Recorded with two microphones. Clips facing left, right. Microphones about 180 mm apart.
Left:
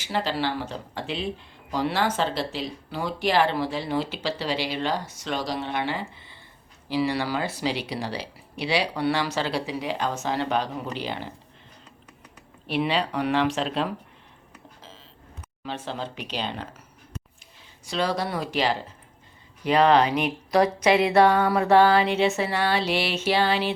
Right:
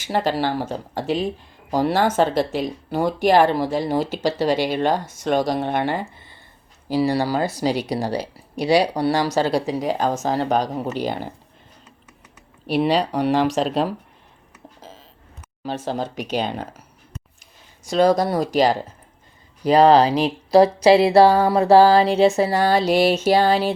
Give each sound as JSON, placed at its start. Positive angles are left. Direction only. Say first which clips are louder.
{"t": 0.0, "sound": "speech", "louder": "right 5 dB", "side_deg": -50}
{"t": 12.6, "sound": "speech", "louder": "right 6 dB", "side_deg": -40}
{"t": 14.8, "sound": "a sound", "louder": "right 7 dB", "side_deg": -40}
{"t": 15.6, "sound": "speech", "louder": "right 7 dB", "side_deg": -40}
{"t": 17.8, "sound": "speech", "louder": "right 9 dB", "side_deg": -45}